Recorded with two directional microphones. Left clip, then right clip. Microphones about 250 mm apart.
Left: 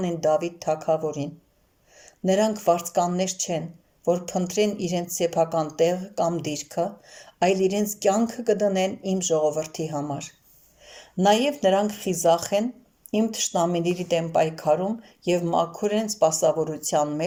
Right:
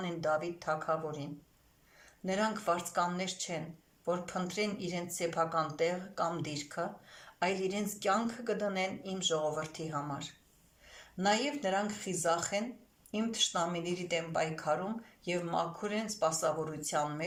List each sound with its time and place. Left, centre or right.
0.0 s speech: left
11.3 s speech: left